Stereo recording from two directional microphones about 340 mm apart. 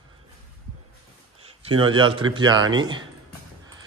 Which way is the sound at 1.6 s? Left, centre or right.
Centre.